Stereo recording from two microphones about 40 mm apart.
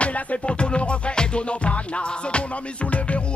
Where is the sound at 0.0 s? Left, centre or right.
Left.